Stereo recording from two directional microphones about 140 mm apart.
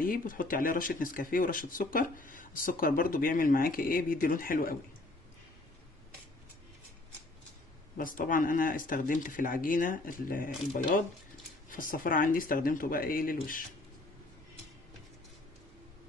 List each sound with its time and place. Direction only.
0.0 s speech: 80° left
8.0 s speech: 80° left
11.7 s speech: 80° left